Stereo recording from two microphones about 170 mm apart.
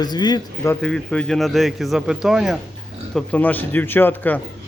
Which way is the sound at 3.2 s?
10° left (ahead or behind).